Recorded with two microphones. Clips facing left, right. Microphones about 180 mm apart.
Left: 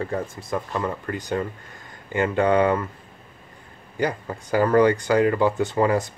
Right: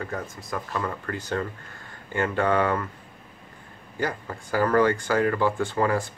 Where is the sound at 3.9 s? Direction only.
15° left (ahead or behind).